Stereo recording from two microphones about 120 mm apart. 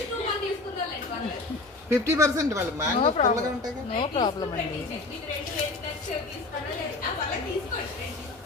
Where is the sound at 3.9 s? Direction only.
40° left (ahead or behind).